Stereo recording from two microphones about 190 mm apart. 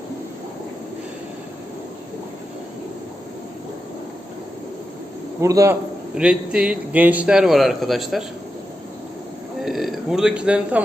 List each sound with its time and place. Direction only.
5.4 s a man's voice: 15° right (ahead or behind)
6.1 s a man's voice: 5° right (ahead or behind)
9.6 s speech: centre (ahead or behind)